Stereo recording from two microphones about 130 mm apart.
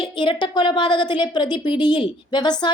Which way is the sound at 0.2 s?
40° left (ahead or behind).